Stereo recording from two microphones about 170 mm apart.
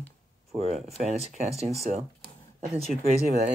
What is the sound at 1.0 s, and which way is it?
Speech, 40° right (ahead or behind).